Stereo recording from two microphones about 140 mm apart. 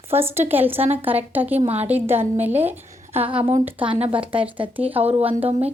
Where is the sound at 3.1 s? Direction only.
45° right (ahead or behind).